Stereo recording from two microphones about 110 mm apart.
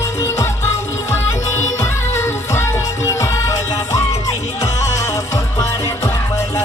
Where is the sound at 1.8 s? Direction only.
25° left (ahead or behind).